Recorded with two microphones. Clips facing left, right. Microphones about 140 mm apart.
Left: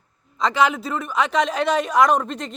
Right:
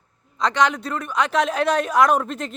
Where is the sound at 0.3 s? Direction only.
Centre (ahead or behind).